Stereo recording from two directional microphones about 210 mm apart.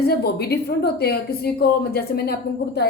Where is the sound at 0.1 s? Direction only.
50° left (ahead or behind).